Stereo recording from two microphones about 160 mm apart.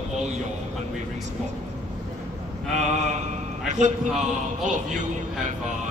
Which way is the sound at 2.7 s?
45° right (ahead or behind).